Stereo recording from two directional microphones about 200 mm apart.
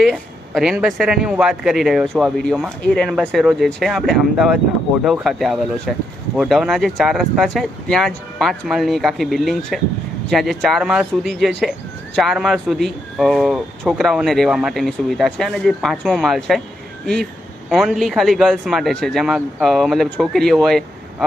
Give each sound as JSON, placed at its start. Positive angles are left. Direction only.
{"t": 0.0, "sound": "speech", "side_deg": 0}
{"t": 17.7, "sound": "speech", "side_deg": 0}